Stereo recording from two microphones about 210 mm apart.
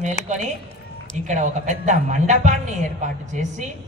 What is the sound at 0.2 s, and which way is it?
Speech, 35° left (ahead or behind).